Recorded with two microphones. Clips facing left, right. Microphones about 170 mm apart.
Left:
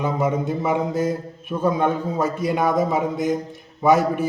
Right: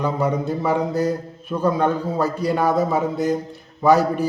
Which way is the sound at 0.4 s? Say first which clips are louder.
Right 1 dB; 15° left (ahead or behind).